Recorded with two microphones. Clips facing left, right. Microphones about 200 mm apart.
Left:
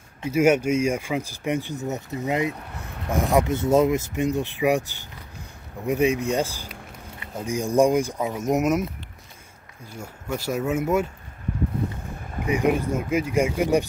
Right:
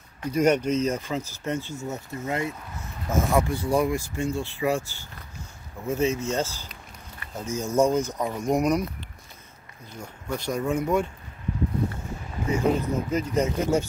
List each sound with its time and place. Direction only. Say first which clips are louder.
0.3 s speech: left 2 dB; 10° left (ahead or behind)
9.9 s speech: left 2 dB; 10° left (ahead or behind)
12.4 s speech: left 2 dB; 15° left (ahead or behind)